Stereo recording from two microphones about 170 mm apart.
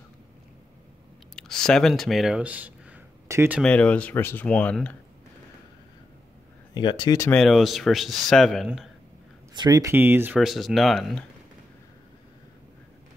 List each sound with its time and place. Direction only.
1.3 s speech: 5° left (ahead or behind); by 3.6 s 10° right (ahead or behind)
3.6 s speech: 5° left (ahead or behind)
6.7 s speech: 25° left (ahead or behind)
7.2 s speech: 5° left (ahead or behind)
9.6 s speech: 20° right (ahead or behind)
10.3 s speech: centre (ahead or behind)